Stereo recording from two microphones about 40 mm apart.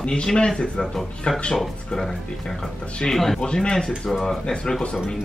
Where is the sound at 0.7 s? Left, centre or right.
Centre.